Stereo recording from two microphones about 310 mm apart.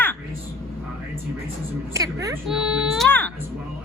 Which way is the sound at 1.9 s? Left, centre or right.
Centre.